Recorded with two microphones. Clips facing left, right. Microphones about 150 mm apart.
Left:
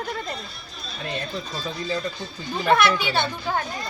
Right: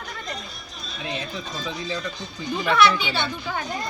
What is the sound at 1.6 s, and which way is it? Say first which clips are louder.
Speech: left 2 dB; 50° left (ahead or behind).